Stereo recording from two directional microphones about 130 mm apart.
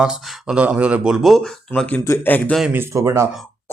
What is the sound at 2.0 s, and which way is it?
Speech, 20° left (ahead or behind).